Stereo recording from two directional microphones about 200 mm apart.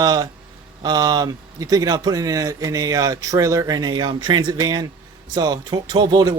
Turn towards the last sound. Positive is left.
turn(degrees=-20)  # may be behind; listen again after turning